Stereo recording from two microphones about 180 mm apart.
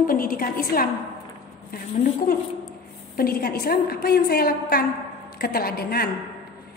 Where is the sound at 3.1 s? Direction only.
55° left (ahead or behind).